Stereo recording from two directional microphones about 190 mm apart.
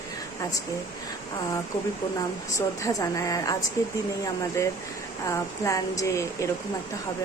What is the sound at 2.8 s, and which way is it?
Speech, 15° left (ahead or behind).